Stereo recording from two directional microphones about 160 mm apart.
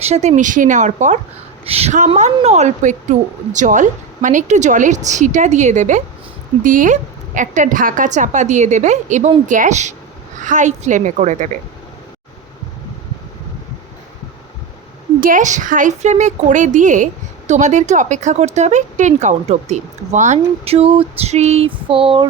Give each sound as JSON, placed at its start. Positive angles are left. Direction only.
{"t": 0.0, "sound": "a woman's voice", "side_deg": -45}
{"t": 15.2, "sound": "a woman's voice", "side_deg": -55}